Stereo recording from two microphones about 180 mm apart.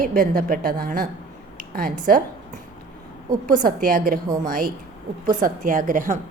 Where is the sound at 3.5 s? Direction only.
50° right (ahead or behind).